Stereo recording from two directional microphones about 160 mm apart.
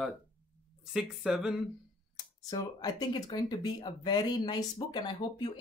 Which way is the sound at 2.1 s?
25° left (ahead or behind).